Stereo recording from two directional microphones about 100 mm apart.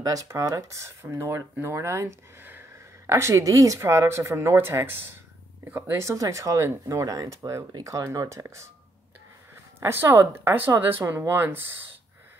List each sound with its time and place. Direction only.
0.0 s speech: 35° right (ahead or behind)
9.8 s speech: 25° right (ahead or behind)